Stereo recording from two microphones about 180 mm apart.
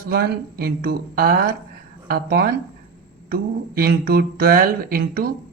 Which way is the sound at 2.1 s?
60° right (ahead or behind).